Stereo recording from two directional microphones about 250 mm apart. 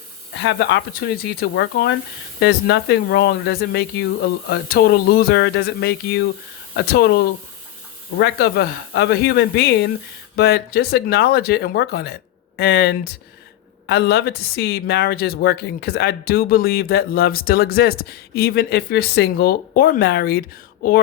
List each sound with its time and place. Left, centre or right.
0.3 s speech: left